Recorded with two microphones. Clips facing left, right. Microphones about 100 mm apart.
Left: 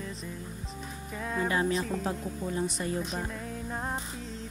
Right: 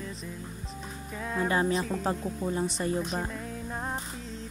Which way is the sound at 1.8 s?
Centre (ahead or behind).